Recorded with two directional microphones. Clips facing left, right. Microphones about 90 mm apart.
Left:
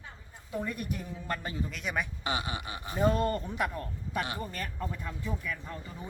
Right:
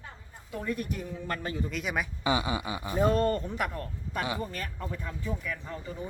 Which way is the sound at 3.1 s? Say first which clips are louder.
Right 3 dB; 10° left (ahead or behind).